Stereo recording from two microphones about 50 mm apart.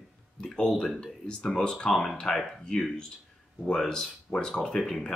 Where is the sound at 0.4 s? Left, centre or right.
Centre.